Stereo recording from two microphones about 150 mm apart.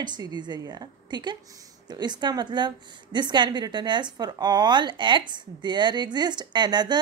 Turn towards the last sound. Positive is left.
turn(degrees=-30)  # may be behind; listen again after turning